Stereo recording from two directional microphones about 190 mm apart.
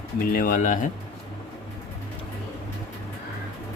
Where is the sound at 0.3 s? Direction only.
45° left (ahead or behind).